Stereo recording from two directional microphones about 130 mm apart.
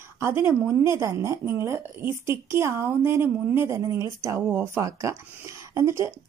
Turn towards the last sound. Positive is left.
turn(degrees=-20)  # may be behind; listen again after turning